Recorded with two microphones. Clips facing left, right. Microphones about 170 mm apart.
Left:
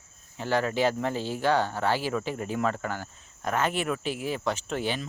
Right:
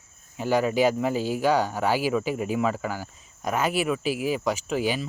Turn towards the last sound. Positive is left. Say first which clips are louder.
# right 4 dB
turn(degrees=-5)  # may be behind; listen again after turning